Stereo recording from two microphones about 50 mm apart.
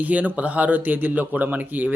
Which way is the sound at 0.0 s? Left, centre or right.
Right.